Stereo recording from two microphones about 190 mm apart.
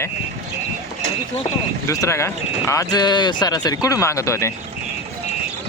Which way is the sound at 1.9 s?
15° left (ahead or behind).